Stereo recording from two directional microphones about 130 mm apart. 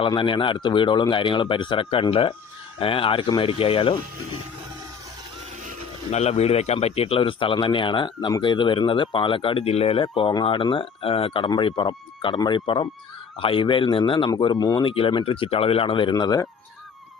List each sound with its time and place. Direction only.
0.1 s a man's voice: 40° left (ahead or behind)
6.1 s a man's voice: 55° left (ahead or behind); by 16.5 s 30° left (ahead or behind)